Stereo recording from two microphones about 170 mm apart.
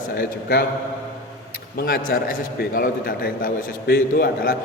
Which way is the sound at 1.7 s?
60° left (ahead or behind).